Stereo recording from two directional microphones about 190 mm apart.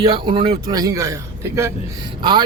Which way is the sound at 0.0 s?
25° right (ahead or behind).